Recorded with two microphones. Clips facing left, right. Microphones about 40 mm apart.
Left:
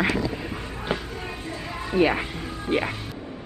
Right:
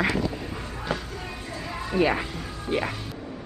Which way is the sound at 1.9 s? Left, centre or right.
Centre.